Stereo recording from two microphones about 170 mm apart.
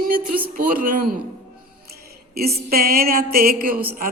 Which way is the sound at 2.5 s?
65° right (ahead or behind).